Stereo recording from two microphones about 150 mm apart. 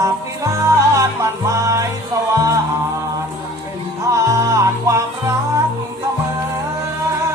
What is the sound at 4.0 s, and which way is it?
Music, 20° right (ahead or behind).